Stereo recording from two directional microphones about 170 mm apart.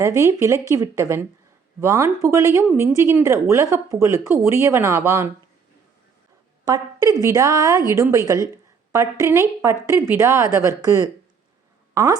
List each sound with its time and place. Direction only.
0.0 s speech: 15° right (ahead or behind)
6.7 s a woman's voice: 20° right (ahead or behind)